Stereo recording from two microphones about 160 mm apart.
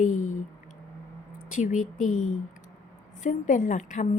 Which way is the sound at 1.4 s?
55° left (ahead or behind).